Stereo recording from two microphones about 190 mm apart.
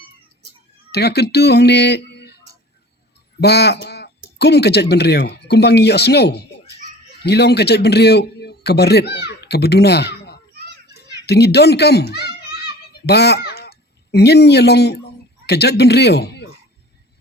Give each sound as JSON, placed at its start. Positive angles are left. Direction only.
{"t": 0.9, "sound": "speech", "side_deg": 60}
{"t": 3.4, "sound": "speech", "side_deg": 60}
{"t": 10.8, "sound": "children playing", "side_deg": 60}
{"t": 15.4, "sound": "speech", "side_deg": 60}